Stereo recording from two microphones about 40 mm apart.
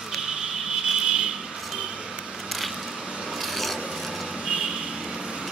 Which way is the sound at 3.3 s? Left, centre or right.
Centre.